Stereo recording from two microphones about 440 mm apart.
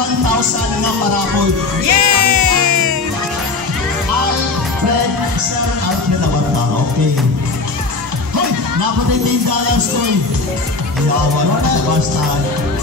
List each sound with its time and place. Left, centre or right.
1.9 s music: right